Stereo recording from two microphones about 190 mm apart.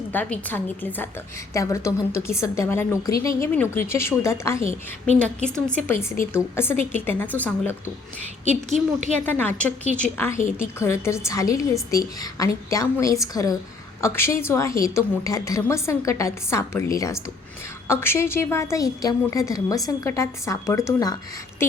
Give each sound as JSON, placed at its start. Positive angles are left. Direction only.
{"t": 0.1, "sound": "a woman's voice", "side_deg": 10}
{"t": 8.4, "sound": "a woman's voice", "side_deg": -40}
{"t": 9.2, "sound": "a woman's voice", "side_deg": 10}